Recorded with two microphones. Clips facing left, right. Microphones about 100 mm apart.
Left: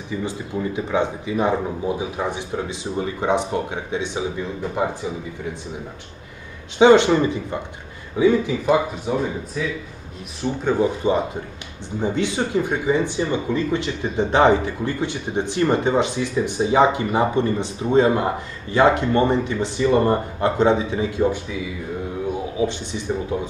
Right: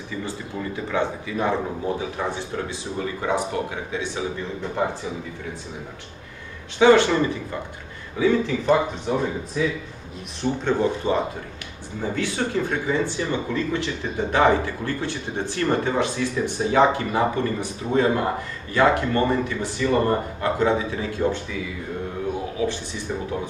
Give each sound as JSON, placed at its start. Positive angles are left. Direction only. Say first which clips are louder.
{"t": 0.2, "sound": "speech", "louder": "left 4 dB", "side_deg": 20}
{"t": 6.8, "sound": "speech", "louder": "left 3 dB", "side_deg": 20}
{"t": 10.4, "sound": "speech", "louder": "left 2 dB", "side_deg": 10}
{"t": 22.6, "sound": "speech", "louder": "left 3 dB", "side_deg": 20}